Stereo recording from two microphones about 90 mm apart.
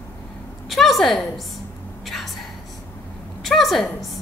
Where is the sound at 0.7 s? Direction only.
Centre (ahead or behind).